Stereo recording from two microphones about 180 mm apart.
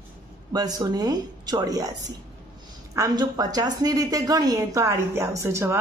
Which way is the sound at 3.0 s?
20° right (ahead or behind).